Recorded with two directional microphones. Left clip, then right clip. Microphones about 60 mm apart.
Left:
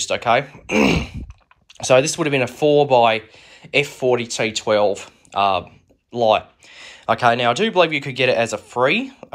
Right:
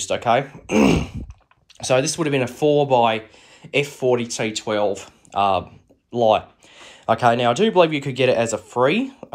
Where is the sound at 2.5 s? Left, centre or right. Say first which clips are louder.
Left 3 dB; right.